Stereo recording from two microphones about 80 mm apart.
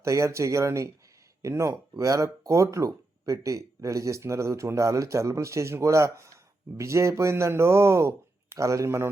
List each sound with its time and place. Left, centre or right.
0.0 s speech: right